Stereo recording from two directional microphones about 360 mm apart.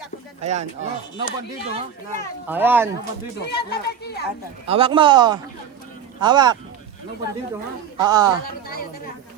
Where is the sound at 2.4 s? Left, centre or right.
Centre.